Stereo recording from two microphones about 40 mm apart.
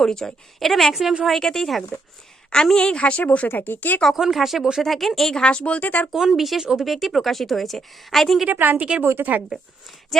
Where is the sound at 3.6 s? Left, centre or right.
Left.